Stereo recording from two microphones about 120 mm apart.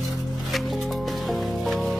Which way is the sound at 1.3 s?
Centre (ahead or behind).